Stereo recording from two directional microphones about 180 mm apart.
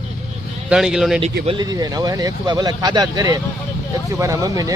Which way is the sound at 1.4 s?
25° right (ahead or behind).